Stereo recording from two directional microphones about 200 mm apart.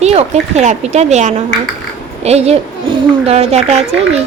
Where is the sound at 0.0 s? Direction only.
30° right (ahead or behind).